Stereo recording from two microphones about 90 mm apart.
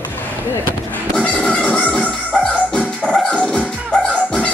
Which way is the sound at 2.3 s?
15° left (ahead or behind).